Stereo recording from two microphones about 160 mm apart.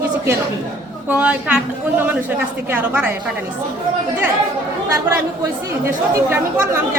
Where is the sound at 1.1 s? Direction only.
10° right (ahead or behind).